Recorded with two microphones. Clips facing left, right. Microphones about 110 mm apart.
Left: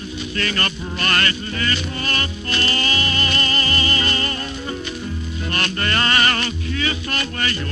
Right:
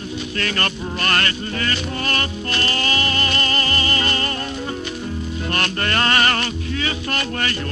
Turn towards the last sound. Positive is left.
turn(degrees=-50)  # may be behind; listen again after turning